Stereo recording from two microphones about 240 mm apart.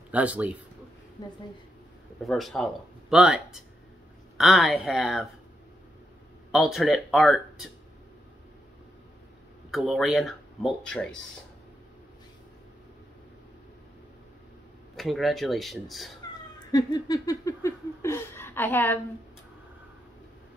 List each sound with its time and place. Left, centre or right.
0.1 s speech: centre
1.2 s a sound: centre
2.2 s speech: centre
6.5 s speech: centre
9.7 s speech: centre
15.0 s speech: centre
16.5 s a sound: centre